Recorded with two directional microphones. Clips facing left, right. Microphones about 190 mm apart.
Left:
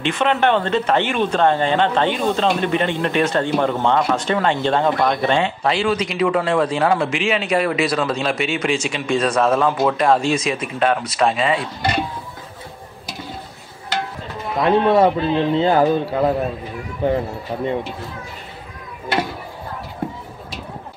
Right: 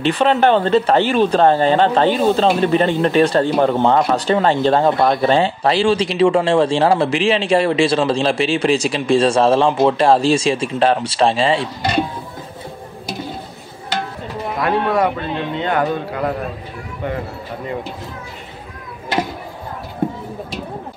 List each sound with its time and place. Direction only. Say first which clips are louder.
0.0 s speech: right 4 dB; 35° right (ahead or behind)
14.6 s a man's voice: left 3 dB; 25° left (ahead or behind)